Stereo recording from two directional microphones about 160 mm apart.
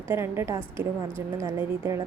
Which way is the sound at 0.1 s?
15° right (ahead or behind).